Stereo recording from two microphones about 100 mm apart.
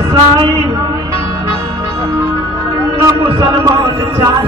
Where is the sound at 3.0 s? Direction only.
35° right (ahead or behind).